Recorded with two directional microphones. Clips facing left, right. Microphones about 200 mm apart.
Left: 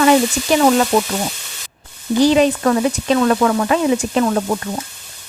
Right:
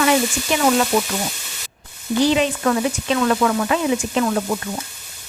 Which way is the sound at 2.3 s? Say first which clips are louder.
Left 5 dB; 40° left (ahead or behind).